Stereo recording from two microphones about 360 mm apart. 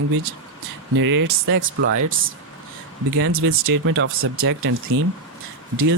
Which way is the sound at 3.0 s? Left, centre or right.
Right.